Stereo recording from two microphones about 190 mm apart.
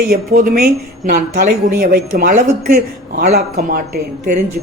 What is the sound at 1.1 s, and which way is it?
A woman's voice, 40° right (ahead or behind).